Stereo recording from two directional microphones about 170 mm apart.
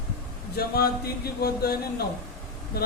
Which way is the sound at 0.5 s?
65° left (ahead or behind).